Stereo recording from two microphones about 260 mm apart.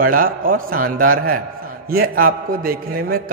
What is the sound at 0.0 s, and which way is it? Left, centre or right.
Speech, right.